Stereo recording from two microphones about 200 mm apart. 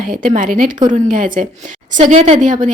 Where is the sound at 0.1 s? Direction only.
40° right (ahead or behind).